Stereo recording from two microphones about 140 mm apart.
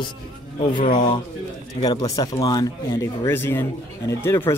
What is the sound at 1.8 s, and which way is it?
Speech, 30° left (ahead or behind).